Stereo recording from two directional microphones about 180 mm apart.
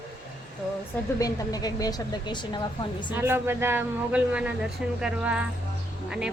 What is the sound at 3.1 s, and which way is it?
Speech, 10° right (ahead or behind).